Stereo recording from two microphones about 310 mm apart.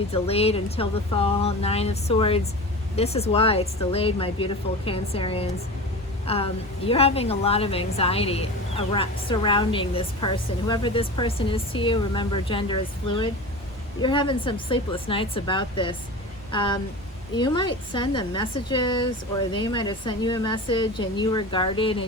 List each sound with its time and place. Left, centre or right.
0.1 s a woman's voice: centre
14.0 s a woman's voice: centre